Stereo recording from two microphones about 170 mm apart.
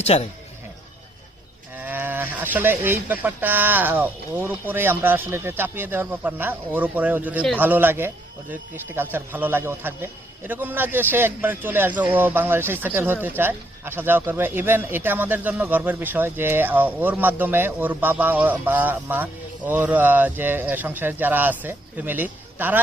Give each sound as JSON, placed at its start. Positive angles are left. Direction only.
{"t": 0.0, "sound": "speech", "side_deg": 40}
{"t": 1.7, "sound": "speech", "side_deg": -10}